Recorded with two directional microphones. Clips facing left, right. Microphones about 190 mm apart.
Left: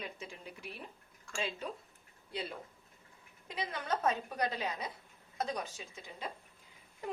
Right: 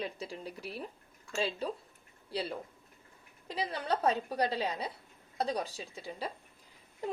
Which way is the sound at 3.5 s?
35° right (ahead or behind).